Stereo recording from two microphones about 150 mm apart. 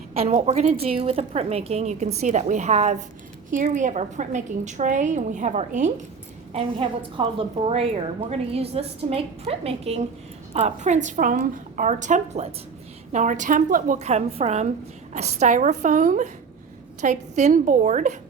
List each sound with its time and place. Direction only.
0.2 s a woman's voice: 45° right (ahead or behind)
6.5 s a woman's voice: 40° right (ahead or behind)
13.1 s a woman's voice: 55° right (ahead or behind)